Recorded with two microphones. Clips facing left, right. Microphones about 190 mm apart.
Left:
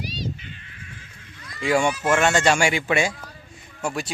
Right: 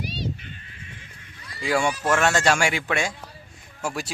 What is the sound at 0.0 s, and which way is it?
Crow, 55° right (ahead or behind).